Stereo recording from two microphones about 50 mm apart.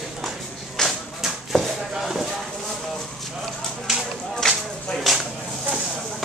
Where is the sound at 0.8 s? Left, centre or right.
Centre.